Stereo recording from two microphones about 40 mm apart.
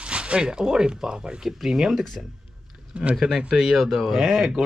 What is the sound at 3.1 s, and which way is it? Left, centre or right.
Speech, centre.